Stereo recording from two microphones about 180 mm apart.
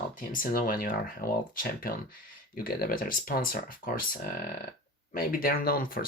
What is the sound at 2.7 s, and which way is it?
Speech, 55° left (ahead or behind).